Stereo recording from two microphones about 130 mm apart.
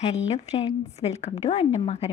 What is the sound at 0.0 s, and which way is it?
A woman's voice, 55° left (ahead or behind).